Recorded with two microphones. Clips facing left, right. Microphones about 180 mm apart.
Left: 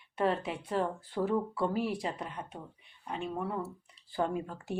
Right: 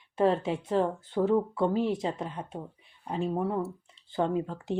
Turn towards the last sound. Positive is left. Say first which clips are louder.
# right 5 dB
turn(degrees=-20)  # may be behind; listen again after turning